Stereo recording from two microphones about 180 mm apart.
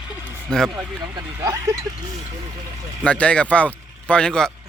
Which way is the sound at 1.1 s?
20° right (ahead or behind).